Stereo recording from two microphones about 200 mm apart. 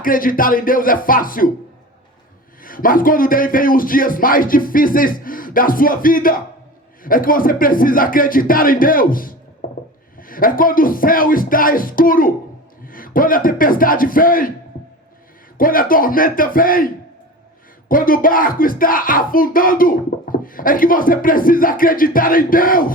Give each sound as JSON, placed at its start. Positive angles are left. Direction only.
{"t": 0.0, "sound": "speech", "side_deg": 45}
{"t": 2.6, "sound": "speech", "side_deg": 45}
{"t": 15.5, "sound": "speech", "side_deg": 45}